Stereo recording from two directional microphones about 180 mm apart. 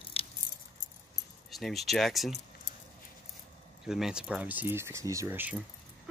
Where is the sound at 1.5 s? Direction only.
Centre (ahead or behind).